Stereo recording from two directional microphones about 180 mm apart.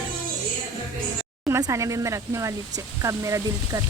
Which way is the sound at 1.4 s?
15° right (ahead or behind).